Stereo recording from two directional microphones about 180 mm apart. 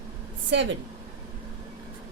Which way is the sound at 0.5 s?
80° right.